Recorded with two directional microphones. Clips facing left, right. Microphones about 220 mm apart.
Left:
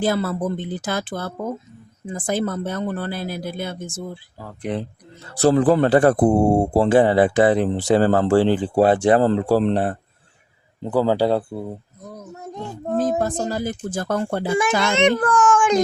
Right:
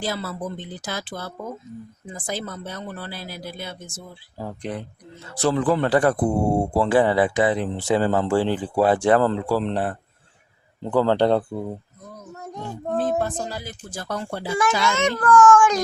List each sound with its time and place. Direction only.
0.0 s speech: 55° left (ahead or behind)
4.7 s speech: 15° left (ahead or behind)
5.4 s speech: 35° left (ahead or behind)
5.9 s speech: 25° left (ahead or behind)
7.0 s speech: 45° left (ahead or behind); by 9.3 s 20° left (ahead or behind)
9.3 s speech: 40° left (ahead or behind)
9.7 s speech: 25° left (ahead or behind)
10.8 s speech: 10° left (ahead or behind)
13.0 s a child's voice: 40° left (ahead or behind); by 15.0 s 55° left (ahead or behind)
15.0 s speech: 20° left (ahead or behind)